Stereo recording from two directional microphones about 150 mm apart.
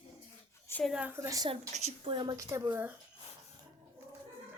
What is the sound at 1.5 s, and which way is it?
Speech, 45° right (ahead or behind).